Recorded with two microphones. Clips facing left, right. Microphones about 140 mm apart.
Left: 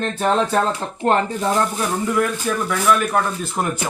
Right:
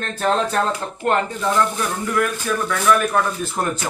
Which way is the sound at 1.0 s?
30° left (ahead or behind).